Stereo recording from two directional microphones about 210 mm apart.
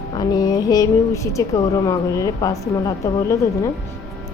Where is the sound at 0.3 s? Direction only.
15° left (ahead or behind).